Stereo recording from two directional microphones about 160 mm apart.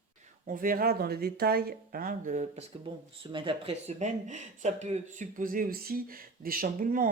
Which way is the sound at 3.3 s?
35° right (ahead or behind).